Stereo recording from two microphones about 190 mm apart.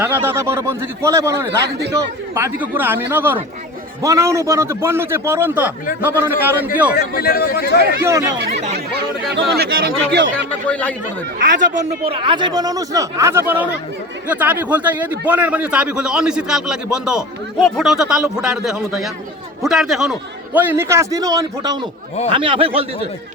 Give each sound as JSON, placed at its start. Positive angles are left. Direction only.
{"t": 0.0, "sound": "a man's voice", "side_deg": -10}
{"t": 6.9, "sound": "a man's voice", "side_deg": 55}
{"t": 8.0, "sound": "a man's voice", "side_deg": -15}
{"t": 9.6, "sound": "speech", "side_deg": -55}
{"t": 10.7, "sound": "speech", "side_deg": 5}
{"t": 11.3, "sound": "speech", "side_deg": -65}
{"t": 12.0, "sound": "a man's voice", "side_deg": -30}